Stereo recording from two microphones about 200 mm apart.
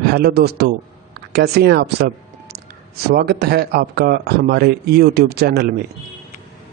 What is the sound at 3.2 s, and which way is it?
A man's voice, 55° right (ahead or behind).